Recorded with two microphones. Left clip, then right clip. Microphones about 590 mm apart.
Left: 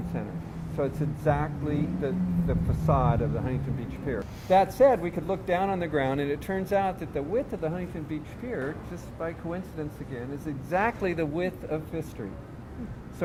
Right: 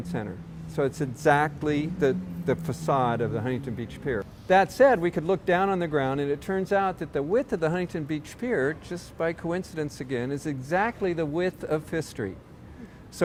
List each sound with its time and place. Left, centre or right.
0.8 s speech: right